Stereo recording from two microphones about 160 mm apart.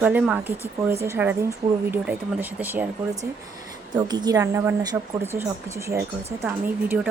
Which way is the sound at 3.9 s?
25° right (ahead or behind).